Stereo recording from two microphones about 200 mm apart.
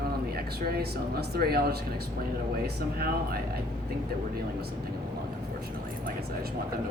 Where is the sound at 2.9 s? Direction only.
50° right (ahead or behind).